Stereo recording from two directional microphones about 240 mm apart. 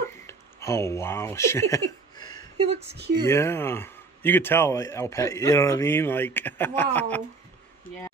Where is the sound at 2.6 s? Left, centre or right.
Right.